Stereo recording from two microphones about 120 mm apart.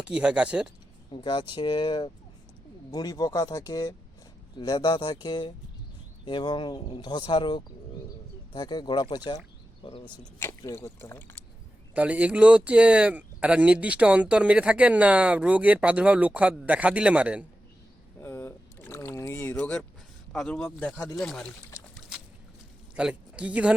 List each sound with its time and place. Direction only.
0.0 s speech: 10° right (ahead or behind)
1.1 s speech: 40° left (ahead or behind)
9.8 s speech: 45° left (ahead or behind)
10.4 s speech: 20° left (ahead or behind)
11.9 s speech: 10° right (ahead or behind)
18.2 s boat: 20° left (ahead or behind)
20.3 s speech: centre (ahead or behind)
23.0 s speech: 10° right (ahead or behind)